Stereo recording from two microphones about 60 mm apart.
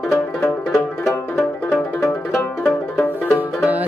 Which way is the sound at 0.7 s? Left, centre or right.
Centre.